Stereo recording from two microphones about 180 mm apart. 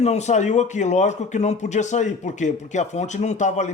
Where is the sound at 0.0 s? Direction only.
40° left (ahead or behind).